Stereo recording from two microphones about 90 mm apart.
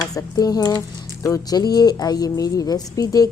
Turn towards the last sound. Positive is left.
turn(degrees=45)  # may be behind; listen again after turning